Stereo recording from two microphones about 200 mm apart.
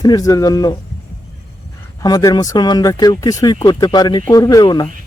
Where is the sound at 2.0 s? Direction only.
20° left (ahead or behind).